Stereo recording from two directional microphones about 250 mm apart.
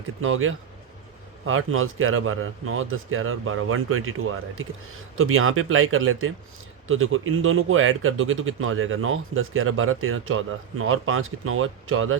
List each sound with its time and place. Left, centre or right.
0.2 s speech: right